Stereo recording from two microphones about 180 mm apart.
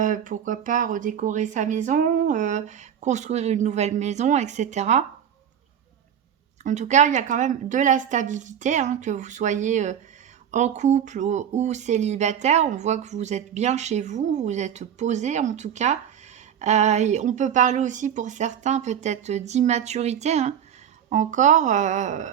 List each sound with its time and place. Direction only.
0.0 s speech: 45° right (ahead or behind)
6.6 s a woman's voice: 40° right (ahead or behind)